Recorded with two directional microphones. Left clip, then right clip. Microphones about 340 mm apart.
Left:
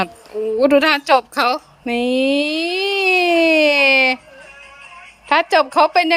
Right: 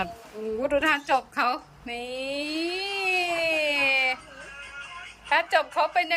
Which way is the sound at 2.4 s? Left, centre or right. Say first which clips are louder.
Left 10 dB; centre.